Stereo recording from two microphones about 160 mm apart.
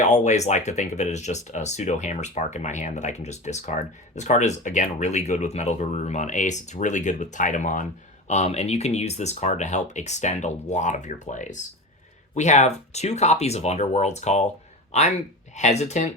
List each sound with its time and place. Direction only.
0.0 s speech: 45° left (ahead or behind)